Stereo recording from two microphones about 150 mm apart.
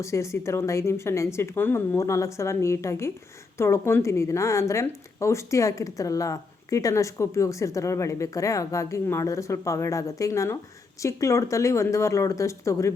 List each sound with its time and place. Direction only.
0.0 s a woman's voice: 20° left (ahead or behind)